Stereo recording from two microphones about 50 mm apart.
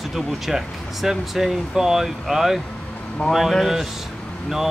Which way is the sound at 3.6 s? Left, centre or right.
Centre.